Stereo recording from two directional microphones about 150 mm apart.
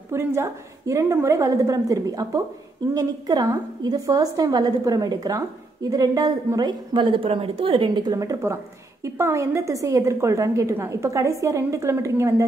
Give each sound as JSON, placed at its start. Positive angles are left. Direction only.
{"t": 0.1, "sound": "a woman's voice", "side_deg": -15}